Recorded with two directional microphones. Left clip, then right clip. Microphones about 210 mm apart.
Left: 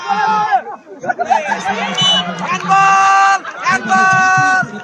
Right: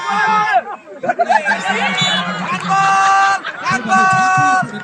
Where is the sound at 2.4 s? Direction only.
35° left (ahead or behind).